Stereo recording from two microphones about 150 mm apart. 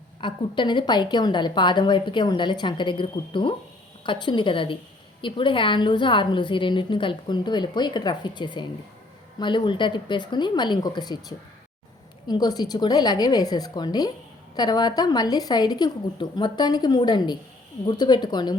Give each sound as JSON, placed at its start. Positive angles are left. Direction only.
{"t": 0.2, "sound": "a woman's voice", "side_deg": 35}